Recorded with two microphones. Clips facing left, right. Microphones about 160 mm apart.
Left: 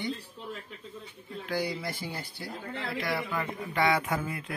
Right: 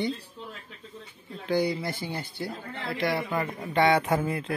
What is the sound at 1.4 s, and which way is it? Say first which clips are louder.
A man's voice: right 6 dB; 25° right (ahead or behind).